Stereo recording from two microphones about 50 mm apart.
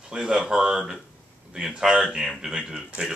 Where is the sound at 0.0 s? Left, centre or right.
Centre.